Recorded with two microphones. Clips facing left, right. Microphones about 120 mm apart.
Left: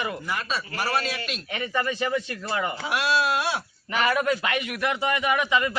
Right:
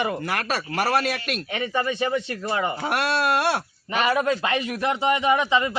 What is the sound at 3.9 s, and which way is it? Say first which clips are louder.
A man's voice: right 2 dB; 25° right (ahead or behind).